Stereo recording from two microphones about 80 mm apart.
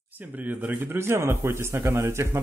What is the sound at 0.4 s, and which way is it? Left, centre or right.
Speech, right.